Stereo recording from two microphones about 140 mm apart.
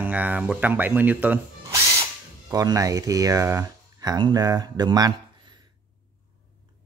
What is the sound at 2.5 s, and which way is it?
Speech, 25° right (ahead or behind).